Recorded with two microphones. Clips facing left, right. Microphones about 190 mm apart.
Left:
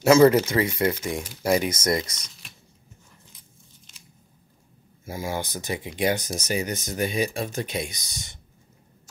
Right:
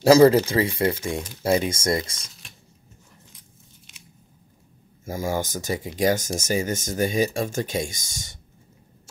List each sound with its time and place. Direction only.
0.0 s speech: 30° right (ahead or behind)
5.0 s speech: 45° right (ahead or behind)